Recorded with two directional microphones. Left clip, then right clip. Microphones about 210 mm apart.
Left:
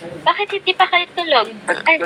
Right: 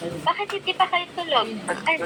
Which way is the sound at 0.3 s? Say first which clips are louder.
Left 8 dB; 35° left (ahead or behind).